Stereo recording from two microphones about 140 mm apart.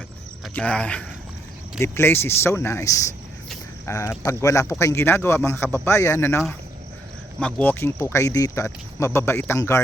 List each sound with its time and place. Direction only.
0.5 s speech: 10° left (ahead or behind)